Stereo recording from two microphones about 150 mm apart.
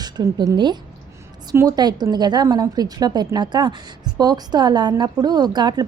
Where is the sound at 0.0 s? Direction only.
25° right (ahead or behind).